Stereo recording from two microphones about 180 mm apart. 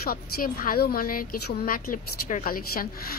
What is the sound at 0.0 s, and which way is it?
A woman's voice, 55° left (ahead or behind).